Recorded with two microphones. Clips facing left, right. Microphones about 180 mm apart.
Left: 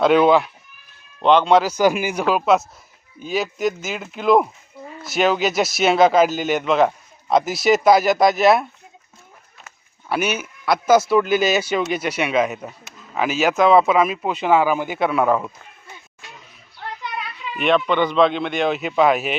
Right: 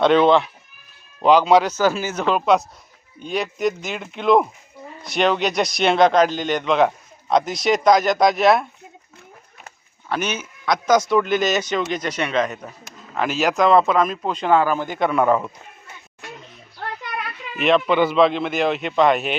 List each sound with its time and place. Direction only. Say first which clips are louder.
0.0 s a man's voice: even; 5° left (ahead or behind)
1.7 s a man's voice: left 2 dB; 15° left (ahead or behind)
10.1 s a man's voice: left 3 dB; 10° left (ahead or behind)
16.8 s a sound: right 1 dB; 60° right (ahead or behind)
17.6 s speech: right 1 dB; centre (ahead or behind)